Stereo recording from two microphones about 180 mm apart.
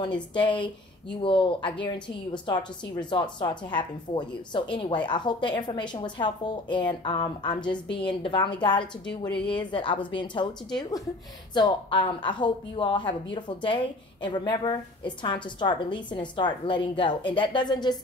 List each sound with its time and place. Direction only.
0.0 s a woman's voice: 25° left (ahead or behind)